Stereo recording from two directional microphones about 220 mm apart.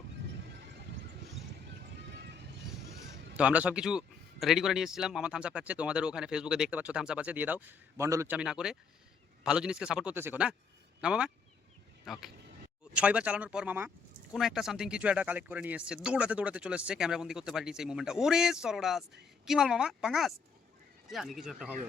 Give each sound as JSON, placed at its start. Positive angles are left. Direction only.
{"t": 2.0, "sound": "music", "side_deg": -50}
{"t": 3.3, "sound": "speech", "side_deg": -5}